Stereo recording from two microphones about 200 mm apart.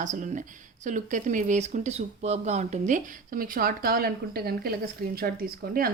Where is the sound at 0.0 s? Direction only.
40° right (ahead or behind).